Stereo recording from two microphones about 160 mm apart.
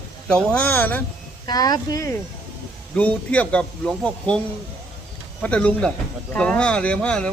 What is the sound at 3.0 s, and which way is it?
Speech, 10° left (ahead or behind).